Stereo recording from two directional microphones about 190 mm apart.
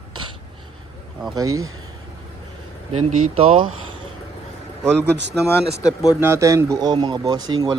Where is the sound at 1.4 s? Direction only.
20° right (ahead or behind).